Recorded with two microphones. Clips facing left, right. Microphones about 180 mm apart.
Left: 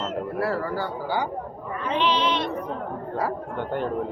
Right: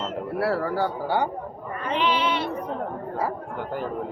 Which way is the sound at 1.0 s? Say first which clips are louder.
Right 1 dB; 60° right (ahead or behind).